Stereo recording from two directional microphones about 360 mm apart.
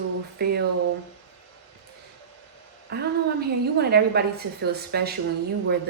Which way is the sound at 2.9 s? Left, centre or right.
Right.